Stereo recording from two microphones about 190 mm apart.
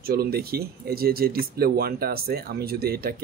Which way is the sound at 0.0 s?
50° right (ahead or behind).